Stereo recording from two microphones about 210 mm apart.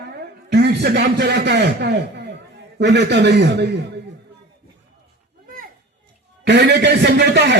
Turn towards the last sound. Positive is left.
turn(degrees=-55)  # may be behind; listen again after turning